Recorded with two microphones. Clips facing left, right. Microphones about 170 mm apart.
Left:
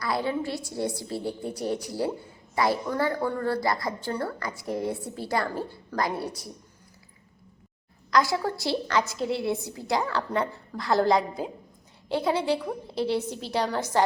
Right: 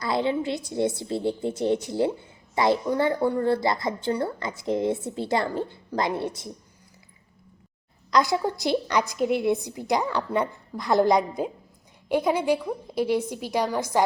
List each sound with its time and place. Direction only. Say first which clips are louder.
0.0 s a woman's voice: right 3 dB; 25° right (ahead or behind)
8.1 s a woman's voice: right 2 dB; 20° right (ahead or behind)